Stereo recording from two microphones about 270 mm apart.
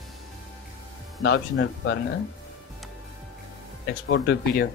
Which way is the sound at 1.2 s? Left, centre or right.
Left.